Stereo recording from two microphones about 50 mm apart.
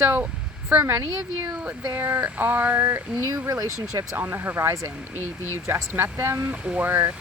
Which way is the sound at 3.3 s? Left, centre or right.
Right.